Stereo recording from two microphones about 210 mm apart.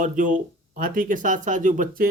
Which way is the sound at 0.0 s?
40° right (ahead or behind).